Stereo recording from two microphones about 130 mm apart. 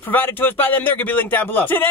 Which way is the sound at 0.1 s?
15° left (ahead or behind).